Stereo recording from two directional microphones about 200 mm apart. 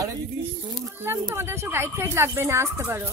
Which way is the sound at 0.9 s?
15° right (ahead or behind).